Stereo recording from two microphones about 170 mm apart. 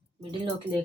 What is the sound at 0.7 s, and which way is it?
Speech, 10° left (ahead or behind).